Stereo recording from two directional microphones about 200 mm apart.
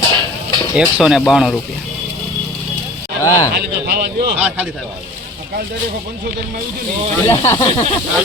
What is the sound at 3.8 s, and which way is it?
Speech, 50° right (ahead or behind).